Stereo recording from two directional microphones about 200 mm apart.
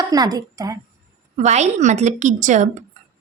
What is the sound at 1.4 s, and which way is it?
A woman's voice, 35° right (ahead or behind).